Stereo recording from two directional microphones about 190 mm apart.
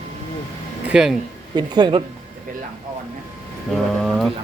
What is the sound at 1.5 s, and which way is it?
Speech, 20° right (ahead or behind).